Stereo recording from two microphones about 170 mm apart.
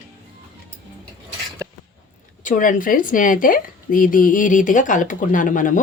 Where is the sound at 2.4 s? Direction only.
50° left (ahead or behind).